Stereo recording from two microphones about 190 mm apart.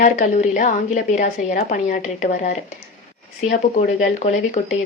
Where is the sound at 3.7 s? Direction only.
40° left (ahead or behind).